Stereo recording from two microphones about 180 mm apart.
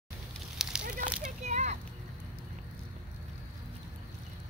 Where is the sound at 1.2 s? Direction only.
40° right (ahead or behind).